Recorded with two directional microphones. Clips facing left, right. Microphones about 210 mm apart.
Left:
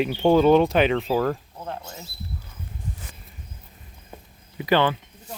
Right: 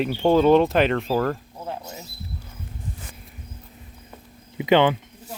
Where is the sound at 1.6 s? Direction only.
5° right (ahead or behind).